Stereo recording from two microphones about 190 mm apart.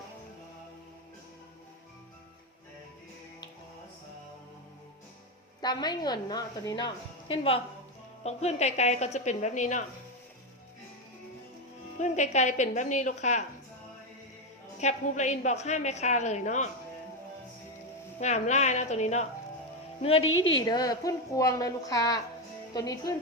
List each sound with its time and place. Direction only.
5.6 s a woman's voice: 20° left (ahead or behind); by 9.8 s 40° left (ahead or behind)
11.9 s a woman's voice: 40° left (ahead or behind)
14.8 s a woman's voice: 40° left (ahead or behind)
18.2 s a woman's voice: 35° left (ahead or behind)
20.2 s a woman's voice: 90° left
20.7 s a woman's voice: 20° left (ahead or behind)